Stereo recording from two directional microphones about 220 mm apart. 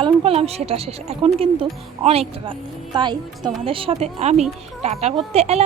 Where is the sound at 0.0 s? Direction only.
25° right (ahead or behind).